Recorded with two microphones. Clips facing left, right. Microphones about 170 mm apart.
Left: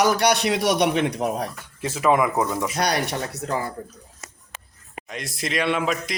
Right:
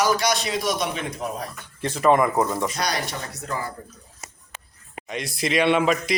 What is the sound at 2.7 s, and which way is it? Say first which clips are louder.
Speech: left 4 dB; 60° left (ahead or behind).